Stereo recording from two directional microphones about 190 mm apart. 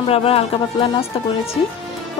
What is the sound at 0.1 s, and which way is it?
A woman's voice, 30° left (ahead or behind).